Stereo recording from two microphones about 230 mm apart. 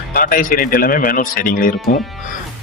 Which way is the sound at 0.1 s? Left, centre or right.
Left.